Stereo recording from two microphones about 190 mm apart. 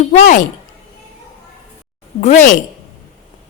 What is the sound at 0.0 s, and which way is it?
Speech, 40° left (ahead or behind).